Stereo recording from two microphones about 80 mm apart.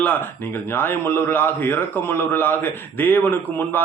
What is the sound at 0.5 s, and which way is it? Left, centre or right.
A man's voice, left.